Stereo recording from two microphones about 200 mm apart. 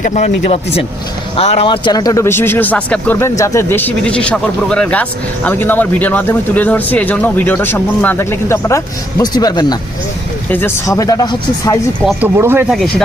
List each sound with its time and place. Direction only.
0.0 s a man's voice: 35° left (ahead or behind); by 11.8 s 20° left (ahead or behind)
12.0 s speech: 10° right (ahead or behind)